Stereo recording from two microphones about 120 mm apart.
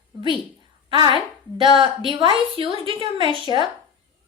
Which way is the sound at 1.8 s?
45° right (ahead or behind).